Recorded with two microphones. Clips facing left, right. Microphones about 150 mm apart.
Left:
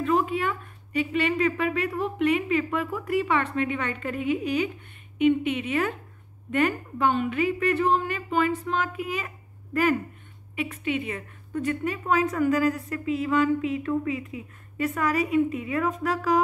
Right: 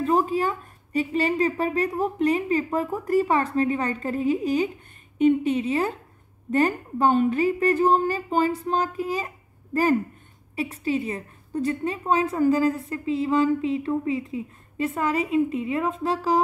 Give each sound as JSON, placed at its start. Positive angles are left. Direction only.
{"t": 0.0, "sound": "a woman's voice", "side_deg": -35}
{"t": 10.5, "sound": "a woman's voice", "side_deg": -35}